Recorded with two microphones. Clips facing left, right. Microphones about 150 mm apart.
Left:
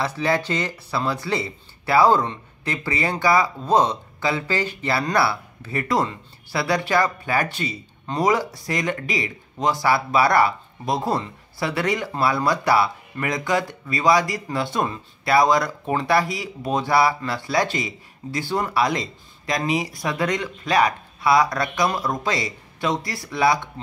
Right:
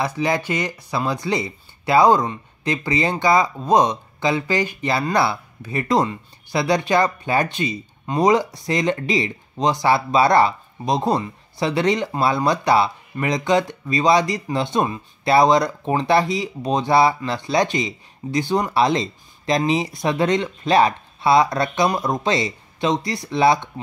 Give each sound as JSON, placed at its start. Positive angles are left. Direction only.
{"t": 0.0, "sound": "speech", "side_deg": -15}